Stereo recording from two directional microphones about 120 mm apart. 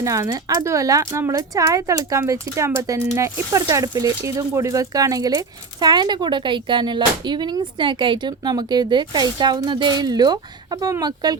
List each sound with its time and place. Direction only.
0.0 s speech: 25° right (ahead or behind)